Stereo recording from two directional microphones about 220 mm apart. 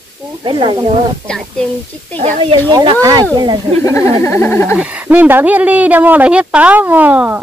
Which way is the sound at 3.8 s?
15° left (ahead or behind).